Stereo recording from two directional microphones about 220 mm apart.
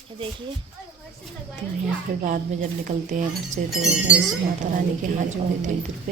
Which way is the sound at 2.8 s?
35° right (ahead or behind).